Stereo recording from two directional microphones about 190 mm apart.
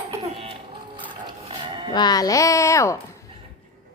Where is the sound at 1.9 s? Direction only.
20° left (ahead or behind).